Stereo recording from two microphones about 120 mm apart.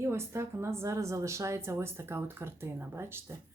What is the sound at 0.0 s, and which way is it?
Speech, 20° right (ahead or behind).